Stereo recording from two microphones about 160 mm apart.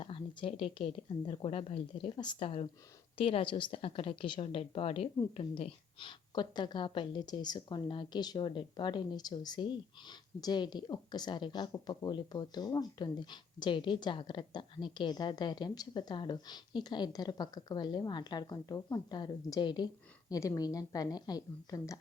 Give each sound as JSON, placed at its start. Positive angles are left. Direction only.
{"t": 0.0, "sound": "a woman's voice", "side_deg": 30}